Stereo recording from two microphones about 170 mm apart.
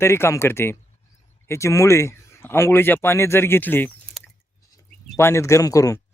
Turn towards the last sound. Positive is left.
turn(degrees=20)  # may be behind; listen again after turning